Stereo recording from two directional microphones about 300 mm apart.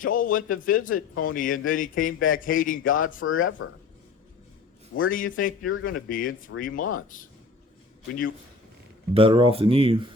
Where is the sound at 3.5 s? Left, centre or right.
Left.